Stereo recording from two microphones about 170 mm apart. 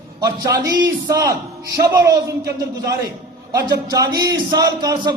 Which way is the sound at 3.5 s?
20° right (ahead or behind).